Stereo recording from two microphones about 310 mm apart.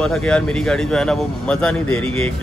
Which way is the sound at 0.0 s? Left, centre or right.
Centre.